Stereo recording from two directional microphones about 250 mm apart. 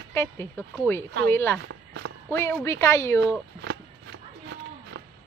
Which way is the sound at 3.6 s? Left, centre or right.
Right.